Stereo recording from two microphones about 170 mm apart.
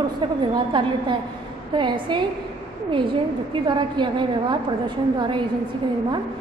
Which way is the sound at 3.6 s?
25° right (ahead or behind).